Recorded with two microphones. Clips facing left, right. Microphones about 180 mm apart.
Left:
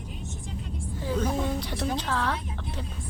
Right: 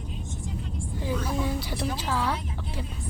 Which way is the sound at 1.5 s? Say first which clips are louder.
Left 1 dB; 5° right (ahead or behind).